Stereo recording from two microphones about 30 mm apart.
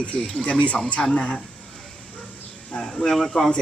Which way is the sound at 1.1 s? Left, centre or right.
Left.